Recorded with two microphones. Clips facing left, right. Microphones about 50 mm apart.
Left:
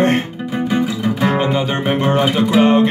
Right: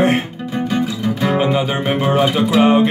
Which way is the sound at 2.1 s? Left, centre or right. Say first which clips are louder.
Even; centre.